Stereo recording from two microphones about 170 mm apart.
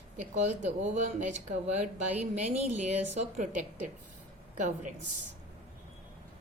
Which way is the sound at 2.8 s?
40° right (ahead or behind).